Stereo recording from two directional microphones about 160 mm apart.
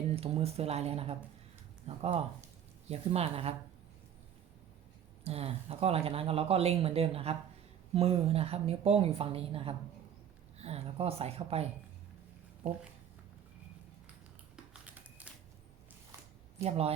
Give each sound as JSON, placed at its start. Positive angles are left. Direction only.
{"t": 0.2, "sound": "speech", "side_deg": -40}
{"t": 5.2, "sound": "speech", "side_deg": -40}
{"t": 14.5, "sound": "typing", "side_deg": -10}
{"t": 16.6, "sound": "speech", "side_deg": -40}